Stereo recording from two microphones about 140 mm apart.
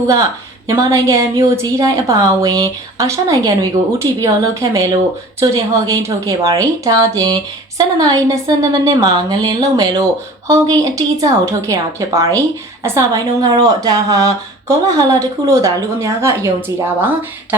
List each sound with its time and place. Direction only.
0.7 s a woman's voice: 25° right (ahead or behind)